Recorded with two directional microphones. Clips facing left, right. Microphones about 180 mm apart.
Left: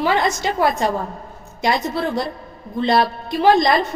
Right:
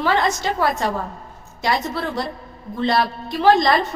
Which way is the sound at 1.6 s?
15° left (ahead or behind).